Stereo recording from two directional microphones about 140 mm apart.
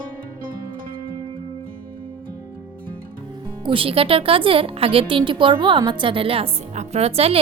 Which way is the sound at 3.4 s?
40° right (ahead or behind).